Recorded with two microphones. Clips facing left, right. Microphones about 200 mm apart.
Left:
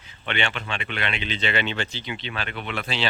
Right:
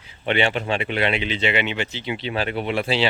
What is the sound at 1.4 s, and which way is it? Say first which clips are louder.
Speech: right 1 dB; 15° right (ahead or behind).